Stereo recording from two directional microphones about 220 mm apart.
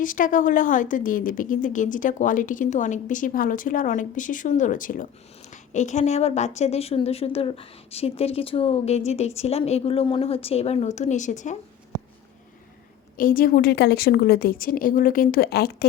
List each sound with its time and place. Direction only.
0.0 s a woman's voice: 35° left (ahead or behind)
13.1 s a woman's voice: 40° left (ahead or behind)